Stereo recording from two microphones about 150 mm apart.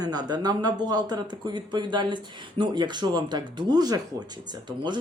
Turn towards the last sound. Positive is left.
turn(degrees=-30)  # may be behind; listen again after turning